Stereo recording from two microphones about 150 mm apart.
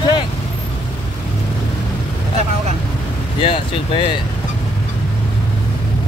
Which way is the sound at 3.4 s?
35° left (ahead or behind).